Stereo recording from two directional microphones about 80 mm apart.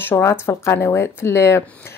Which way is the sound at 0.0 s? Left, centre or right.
Left.